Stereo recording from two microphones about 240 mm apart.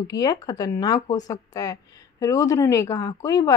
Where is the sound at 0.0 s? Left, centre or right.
Centre.